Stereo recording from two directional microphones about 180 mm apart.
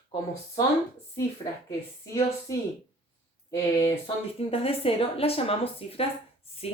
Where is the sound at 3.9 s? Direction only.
35° left (ahead or behind).